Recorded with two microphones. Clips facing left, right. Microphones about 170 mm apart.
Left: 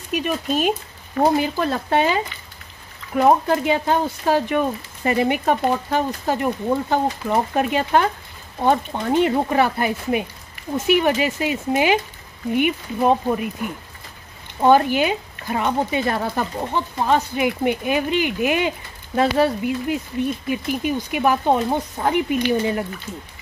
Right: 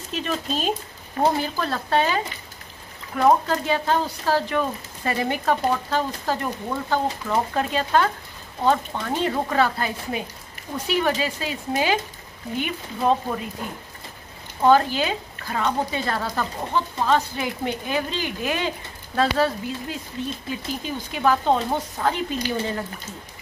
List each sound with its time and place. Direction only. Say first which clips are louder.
0.1 s speech: left 5 dB; 10° left (ahead or behind)
14.6 s speech: left 3 dB; 15° left (ahead or behind)